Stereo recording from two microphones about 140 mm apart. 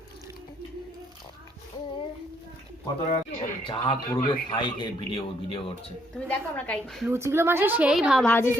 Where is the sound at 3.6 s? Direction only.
40° left (ahead or behind).